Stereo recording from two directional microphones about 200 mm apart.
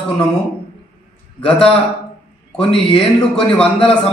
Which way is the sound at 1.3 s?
5° left (ahead or behind).